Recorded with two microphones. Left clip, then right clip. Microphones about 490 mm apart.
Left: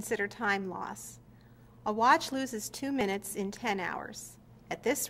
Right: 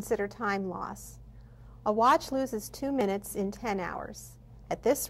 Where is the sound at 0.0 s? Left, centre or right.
Right.